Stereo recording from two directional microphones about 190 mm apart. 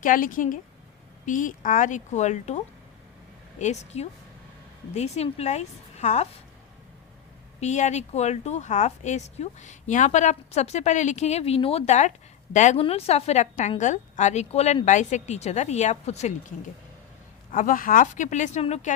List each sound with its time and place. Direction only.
0.0 s a woman's voice: 45° left (ahead or behind)
3.6 s a woman's voice: 35° left (ahead or behind)
7.6 s a woman's voice: 35° left (ahead or behind)
17.5 s a woman's voice: 45° left (ahead or behind)